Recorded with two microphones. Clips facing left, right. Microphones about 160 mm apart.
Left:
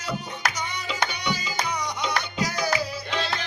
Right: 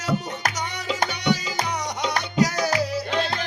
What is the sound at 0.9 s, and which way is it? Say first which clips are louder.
Music: right 3 dB; 40° right (ahead or behind).